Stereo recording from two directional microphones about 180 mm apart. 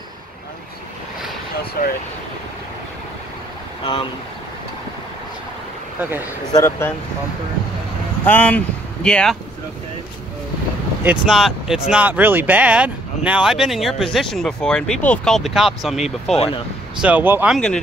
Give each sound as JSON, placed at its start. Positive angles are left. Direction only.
{"t": 1.8, "sound": "speech", "side_deg": 55}
{"t": 3.8, "sound": "speech", "side_deg": 25}
{"t": 6.5, "sound": "speech", "side_deg": 15}
{"t": 8.3, "sound": "speech", "side_deg": 10}
{"t": 11.1, "sound": "speech", "side_deg": 0}
{"t": 16.3, "sound": "speech", "side_deg": 30}
{"t": 17.0, "sound": "speech", "side_deg": -10}